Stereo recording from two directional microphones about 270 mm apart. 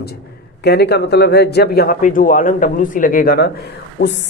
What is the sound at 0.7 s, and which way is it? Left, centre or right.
A woman's voice, left.